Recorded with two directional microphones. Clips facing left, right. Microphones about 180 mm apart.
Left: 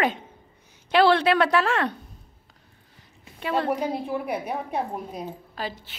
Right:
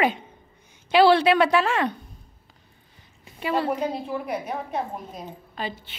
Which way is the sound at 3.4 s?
5° right (ahead or behind).